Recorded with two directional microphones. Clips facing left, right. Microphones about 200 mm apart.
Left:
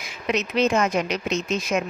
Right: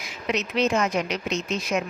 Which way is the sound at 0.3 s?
50° left (ahead or behind).